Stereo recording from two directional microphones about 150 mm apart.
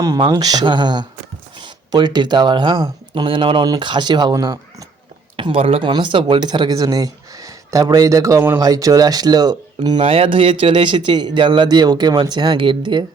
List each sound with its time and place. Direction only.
0.2 s speech: 25° right (ahead or behind)
5.4 s speech: 40° right (ahead or behind)
10.0 s speech: 40° right (ahead or behind)